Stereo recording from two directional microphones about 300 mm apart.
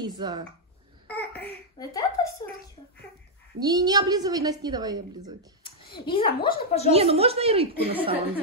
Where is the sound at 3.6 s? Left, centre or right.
Centre.